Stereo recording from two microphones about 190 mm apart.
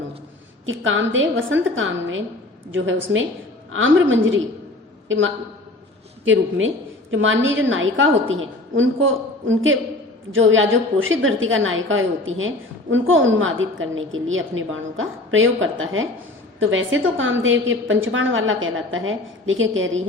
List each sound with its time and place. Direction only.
0.6 s a woman's voice: 90° right